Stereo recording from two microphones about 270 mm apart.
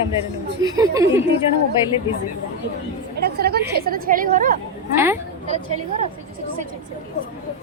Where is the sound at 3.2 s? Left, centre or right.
Right.